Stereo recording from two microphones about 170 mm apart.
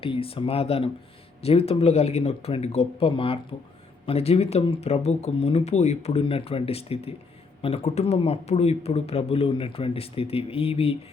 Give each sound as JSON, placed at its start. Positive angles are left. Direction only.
{"t": 0.0, "sound": "speech", "side_deg": 35}